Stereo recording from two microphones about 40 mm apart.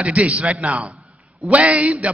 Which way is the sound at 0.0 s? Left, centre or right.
Right.